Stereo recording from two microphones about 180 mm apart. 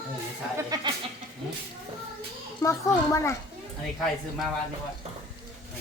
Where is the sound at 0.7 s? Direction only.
20° right (ahead or behind).